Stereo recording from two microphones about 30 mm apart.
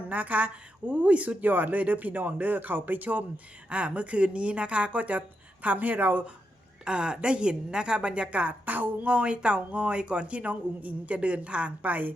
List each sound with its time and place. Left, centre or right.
0.1 s speech: right
0.9 s speech: right
3.7 s speech: right
6.8 s a woman's voice: right
8.6 s speech: right
9.0 s speech: right